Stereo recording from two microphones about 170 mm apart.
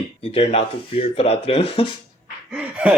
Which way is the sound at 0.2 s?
35° left (ahead or behind).